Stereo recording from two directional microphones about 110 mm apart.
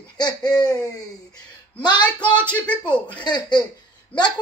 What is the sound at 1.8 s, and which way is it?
Speech, 40° left (ahead or behind).